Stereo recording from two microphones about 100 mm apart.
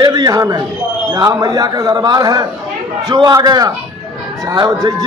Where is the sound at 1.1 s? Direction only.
40° right (ahead or behind).